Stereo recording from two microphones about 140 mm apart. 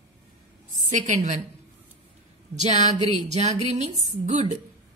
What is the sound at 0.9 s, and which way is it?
Speech, 60° right (ahead or behind).